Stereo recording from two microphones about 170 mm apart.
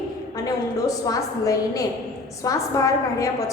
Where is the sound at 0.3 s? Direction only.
20° left (ahead or behind).